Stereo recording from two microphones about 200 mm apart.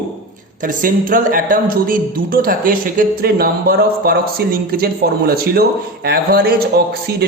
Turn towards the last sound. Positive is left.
turn(degrees=-50)  # may be behind; listen again after turning